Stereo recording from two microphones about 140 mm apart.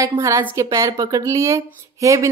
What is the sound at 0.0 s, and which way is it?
A woman's voice, 25° right (ahead or behind).